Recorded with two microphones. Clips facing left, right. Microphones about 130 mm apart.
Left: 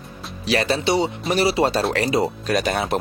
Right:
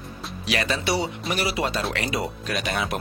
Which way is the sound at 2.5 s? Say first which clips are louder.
Left 6 dB; 40° left (ahead or behind).